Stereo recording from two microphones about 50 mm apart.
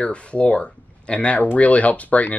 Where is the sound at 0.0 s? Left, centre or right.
Left.